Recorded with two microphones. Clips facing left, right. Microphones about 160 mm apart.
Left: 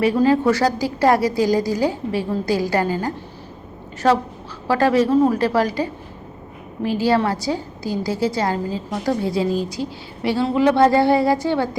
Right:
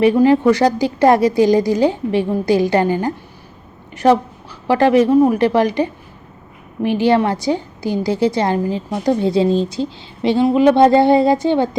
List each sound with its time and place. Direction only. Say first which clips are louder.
0.0 s a woman's voice: right 4 dB; 20° right (ahead or behind)
4.7 s a woman's voice: right 4 dB; 20° right (ahead or behind)